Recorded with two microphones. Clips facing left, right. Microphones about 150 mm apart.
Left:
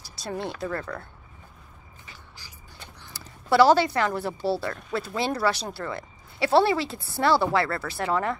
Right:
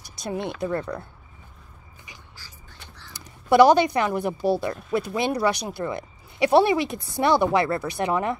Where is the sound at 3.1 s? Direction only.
20° right (ahead or behind).